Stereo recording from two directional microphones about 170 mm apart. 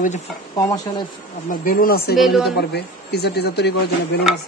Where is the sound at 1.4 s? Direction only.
55° left (ahead or behind).